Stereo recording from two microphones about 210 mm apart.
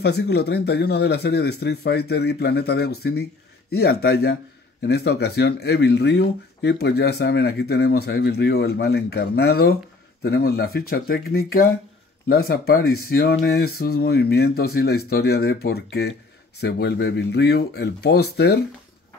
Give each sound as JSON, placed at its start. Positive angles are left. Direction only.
{"t": 0.0, "sound": "speech", "side_deg": 50}